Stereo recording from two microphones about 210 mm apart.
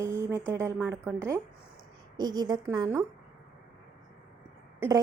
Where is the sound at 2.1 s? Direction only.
20° right (ahead or behind).